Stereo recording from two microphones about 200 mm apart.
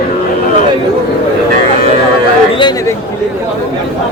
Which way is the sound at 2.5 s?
20° left (ahead or behind).